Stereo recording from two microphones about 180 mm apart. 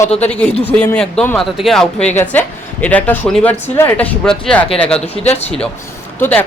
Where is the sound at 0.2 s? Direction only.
5° left (ahead or behind).